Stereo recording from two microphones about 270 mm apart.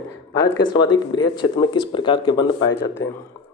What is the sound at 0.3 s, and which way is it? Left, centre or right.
Speech, centre.